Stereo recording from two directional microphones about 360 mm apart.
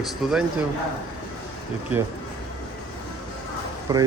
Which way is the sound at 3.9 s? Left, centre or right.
Centre.